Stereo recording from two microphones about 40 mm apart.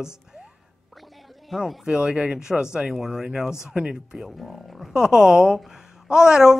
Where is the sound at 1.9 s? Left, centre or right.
Right; by 4.9 s centre.